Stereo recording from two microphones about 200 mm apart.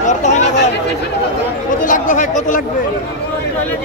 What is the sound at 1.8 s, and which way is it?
Speech, 40° left (ahead or behind).